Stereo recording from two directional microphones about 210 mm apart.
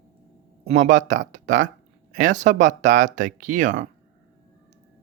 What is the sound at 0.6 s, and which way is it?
Speech, 35° right (ahead or behind).